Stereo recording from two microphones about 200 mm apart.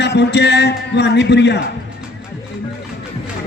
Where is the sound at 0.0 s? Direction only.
60° left (ahead or behind).